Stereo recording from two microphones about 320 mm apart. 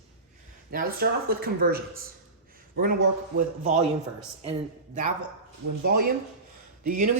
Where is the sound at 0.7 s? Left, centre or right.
Right.